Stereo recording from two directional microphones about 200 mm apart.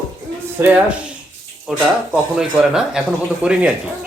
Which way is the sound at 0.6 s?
10° right (ahead or behind).